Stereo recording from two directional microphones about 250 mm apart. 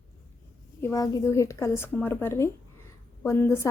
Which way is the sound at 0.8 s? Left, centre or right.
Centre.